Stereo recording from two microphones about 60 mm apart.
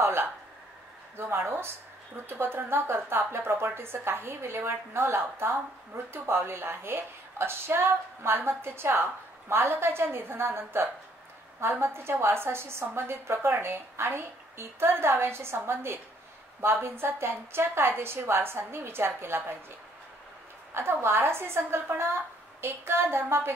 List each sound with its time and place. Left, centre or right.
0.0 s a sound: right
2.2 s a woman's voice: right
20.7 s a woman's voice: right